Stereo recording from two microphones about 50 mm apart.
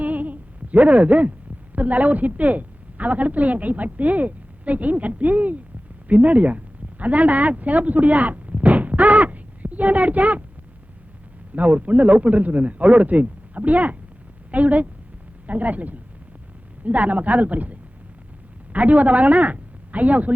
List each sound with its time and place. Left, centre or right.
0.0 s a sound: right
1.7 s a woman's voice: right
11.5 s a woman's voice: right